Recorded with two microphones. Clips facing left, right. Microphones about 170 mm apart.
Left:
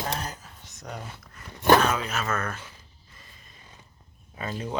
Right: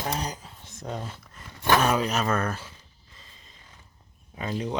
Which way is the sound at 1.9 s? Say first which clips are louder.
Right 4 dB; 40° right (ahead or behind).